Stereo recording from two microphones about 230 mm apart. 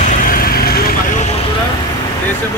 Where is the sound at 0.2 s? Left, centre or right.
Left.